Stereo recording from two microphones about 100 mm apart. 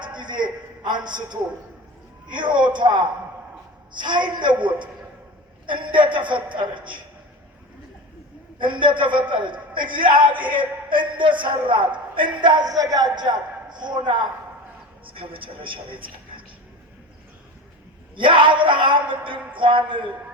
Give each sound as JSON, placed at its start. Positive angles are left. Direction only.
{"t": 0.0, "sound": "a sound", "side_deg": -50}
{"t": 2.2, "sound": "a man's voice", "side_deg": -50}
{"t": 5.6, "sound": "a man's voice", "side_deg": -55}
{"t": 8.5, "sound": "a man's voice", "side_deg": -55}
{"t": 15.0, "sound": "speech", "side_deg": -60}
{"t": 18.2, "sound": "speech", "side_deg": -55}